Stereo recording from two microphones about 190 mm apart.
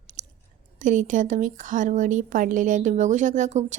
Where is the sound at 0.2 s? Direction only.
40° right (ahead or behind).